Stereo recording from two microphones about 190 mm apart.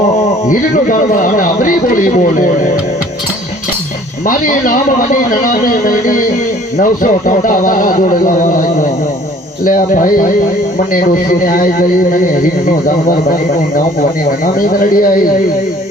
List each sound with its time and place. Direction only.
0.2 s speech: 40° left (ahead or behind)
4.3 s speech: 45° left (ahead or behind)